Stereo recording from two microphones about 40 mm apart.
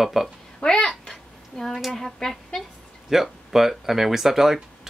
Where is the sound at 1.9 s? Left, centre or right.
Centre.